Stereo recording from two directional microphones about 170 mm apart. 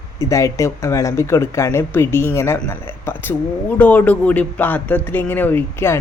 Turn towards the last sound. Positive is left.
turn(degrees=15)  # may be behind; listen again after turning